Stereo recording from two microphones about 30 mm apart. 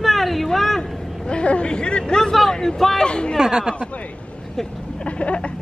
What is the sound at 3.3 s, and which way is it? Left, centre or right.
Speech, centre.